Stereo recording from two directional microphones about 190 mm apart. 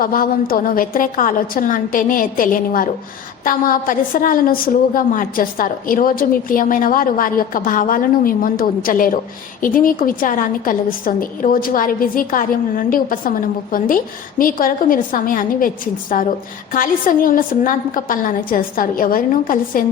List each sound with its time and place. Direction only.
0.0 s a woman's voice: 50° left (ahead or behind)